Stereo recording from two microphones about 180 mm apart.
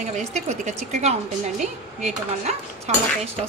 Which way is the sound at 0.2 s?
40° right (ahead or behind).